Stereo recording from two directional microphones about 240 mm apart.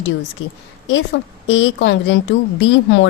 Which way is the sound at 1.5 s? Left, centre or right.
Left.